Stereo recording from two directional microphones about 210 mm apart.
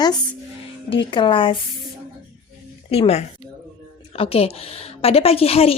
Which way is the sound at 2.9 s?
30° left (ahead or behind).